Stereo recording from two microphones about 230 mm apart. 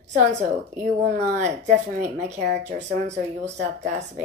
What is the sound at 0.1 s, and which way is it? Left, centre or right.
A woman's voice, right.